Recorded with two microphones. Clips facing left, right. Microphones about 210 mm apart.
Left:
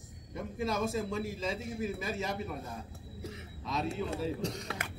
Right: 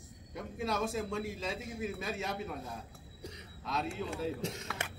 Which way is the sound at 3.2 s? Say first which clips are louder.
Left 2 dB; centre (ahead or behind).